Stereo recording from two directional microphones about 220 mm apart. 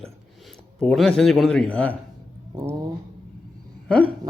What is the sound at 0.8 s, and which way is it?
Speech, 5° left (ahead or behind).